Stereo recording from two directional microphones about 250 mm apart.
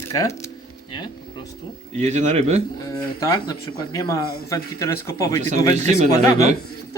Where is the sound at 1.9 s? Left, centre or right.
Right.